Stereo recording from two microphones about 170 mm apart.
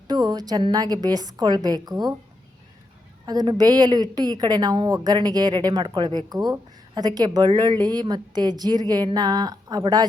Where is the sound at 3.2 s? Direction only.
25° right (ahead or behind).